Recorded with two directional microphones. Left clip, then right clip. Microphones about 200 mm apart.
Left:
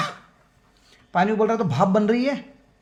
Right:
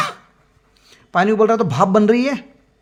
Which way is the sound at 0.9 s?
40° right (ahead or behind).